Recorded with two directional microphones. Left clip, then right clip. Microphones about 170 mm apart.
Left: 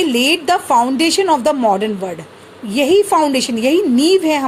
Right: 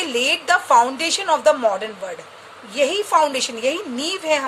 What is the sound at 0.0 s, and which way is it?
A woman's voice, 35° left (ahead or behind).